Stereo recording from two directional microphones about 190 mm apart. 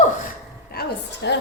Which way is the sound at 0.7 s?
55° left (ahead or behind).